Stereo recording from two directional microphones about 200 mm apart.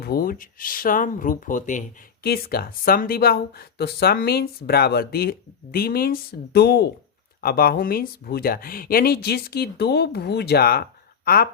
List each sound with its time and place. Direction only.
0.0 s speech: 50° left (ahead or behind)
2.2 s speech: 50° left (ahead or behind)